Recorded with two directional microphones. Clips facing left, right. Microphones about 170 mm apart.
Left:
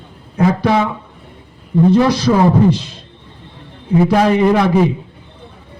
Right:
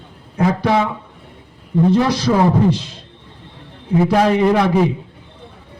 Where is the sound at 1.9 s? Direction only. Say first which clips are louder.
Left 3 dB; 90° left.